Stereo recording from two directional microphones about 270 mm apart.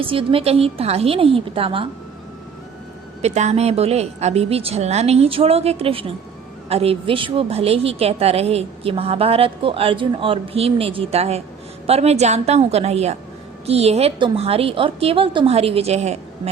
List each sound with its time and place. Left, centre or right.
0.0 s a woman's voice: centre
3.2 s a woman's voice: right